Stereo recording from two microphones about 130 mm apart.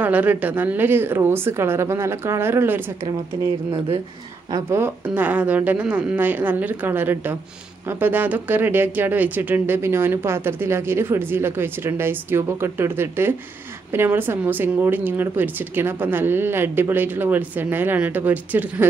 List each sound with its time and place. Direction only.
0.0 s speech: 15° right (ahead or behind)
4.5 s speech: 25° right (ahead or behind)